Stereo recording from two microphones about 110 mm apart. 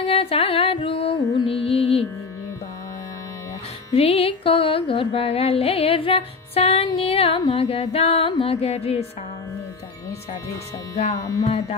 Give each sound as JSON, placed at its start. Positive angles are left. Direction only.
{"t": 0.1, "sound": "music", "side_deg": 60}
{"t": 3.9, "sound": "music", "side_deg": 65}